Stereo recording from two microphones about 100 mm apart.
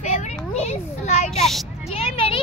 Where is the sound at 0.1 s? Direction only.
90° left.